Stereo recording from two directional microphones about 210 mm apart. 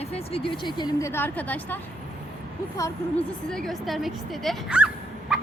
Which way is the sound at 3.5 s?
Centre (ahead or behind).